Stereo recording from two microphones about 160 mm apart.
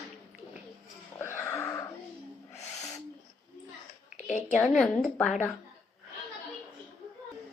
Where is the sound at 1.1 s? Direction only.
15° left (ahead or behind).